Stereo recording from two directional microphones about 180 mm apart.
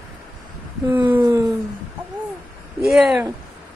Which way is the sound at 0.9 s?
10° right (ahead or behind).